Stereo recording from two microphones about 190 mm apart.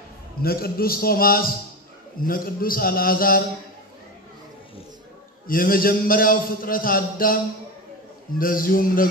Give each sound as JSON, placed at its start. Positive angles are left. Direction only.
{"t": 0.4, "sound": "a man's voice", "side_deg": 50}
{"t": 5.5, "sound": "a man's voice", "side_deg": 50}
{"t": 8.4, "sound": "a man's voice", "side_deg": 50}